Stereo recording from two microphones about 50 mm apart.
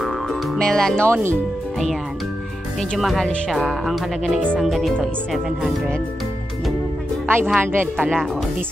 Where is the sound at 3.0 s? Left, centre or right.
Centre.